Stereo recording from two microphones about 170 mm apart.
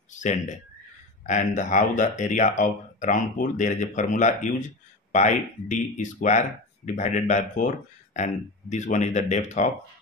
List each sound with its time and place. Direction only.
0.1 s speech: 45° left (ahead or behind)